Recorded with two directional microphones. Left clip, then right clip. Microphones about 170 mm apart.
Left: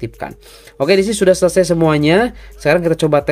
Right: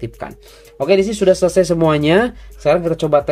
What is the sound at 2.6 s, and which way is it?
Speech, 25° left (ahead or behind).